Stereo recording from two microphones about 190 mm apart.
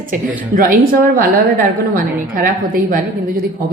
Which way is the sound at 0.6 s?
45° right (ahead or behind).